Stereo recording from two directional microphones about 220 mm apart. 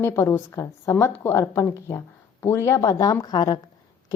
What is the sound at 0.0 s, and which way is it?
Speech, 10° left (ahead or behind).